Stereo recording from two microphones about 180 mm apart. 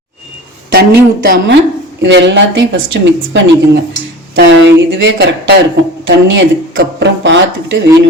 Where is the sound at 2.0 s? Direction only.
75° right (ahead or behind).